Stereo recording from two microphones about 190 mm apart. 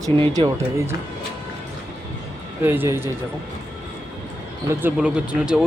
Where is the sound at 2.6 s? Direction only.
10° right (ahead or behind).